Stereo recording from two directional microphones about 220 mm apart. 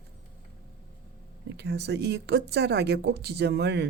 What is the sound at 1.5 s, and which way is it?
Speech, 50° right (ahead or behind).